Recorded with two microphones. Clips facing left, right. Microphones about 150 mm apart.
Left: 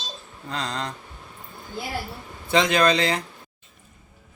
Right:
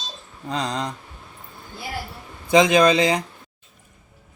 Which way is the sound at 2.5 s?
15° right (ahead or behind).